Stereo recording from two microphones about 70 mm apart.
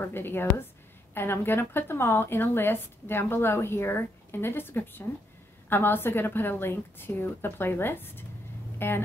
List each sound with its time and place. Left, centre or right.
0.0 s a woman's voice: left